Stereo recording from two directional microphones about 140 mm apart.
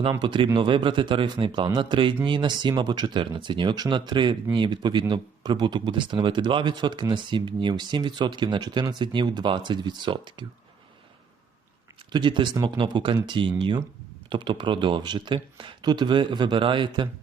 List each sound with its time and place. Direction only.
0.0 s speech: 35° right (ahead or behind)
12.1 s speech: 35° right (ahead or behind)